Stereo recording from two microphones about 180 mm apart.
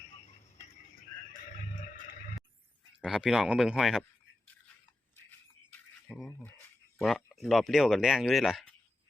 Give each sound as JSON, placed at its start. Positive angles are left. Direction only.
{"t": 0.3, "sound": "tick-tock", "side_deg": 40}
{"t": 1.3, "sound": "a sound", "side_deg": 50}
{"t": 3.0, "sound": "speech", "side_deg": -5}
{"t": 7.0, "sound": "speech", "side_deg": 0}